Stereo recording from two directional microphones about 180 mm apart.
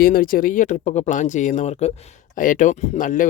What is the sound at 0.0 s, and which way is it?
Speech, 55° left (ahead or behind).